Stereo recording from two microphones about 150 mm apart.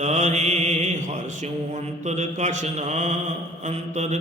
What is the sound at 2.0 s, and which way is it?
Mantra, 50° right (ahead or behind).